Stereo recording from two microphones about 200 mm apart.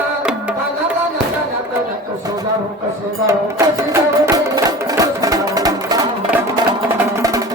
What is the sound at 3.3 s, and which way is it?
Music, 15° right (ahead or behind).